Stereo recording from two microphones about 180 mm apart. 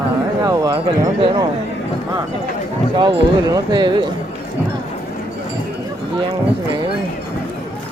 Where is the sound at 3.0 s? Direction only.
25° right (ahead or behind).